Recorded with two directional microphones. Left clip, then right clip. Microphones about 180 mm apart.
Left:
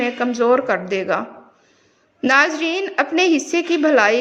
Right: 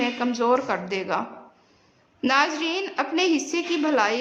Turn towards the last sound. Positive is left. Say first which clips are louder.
# left 7 dB
turn(degrees=25)  # may be behind; listen again after turning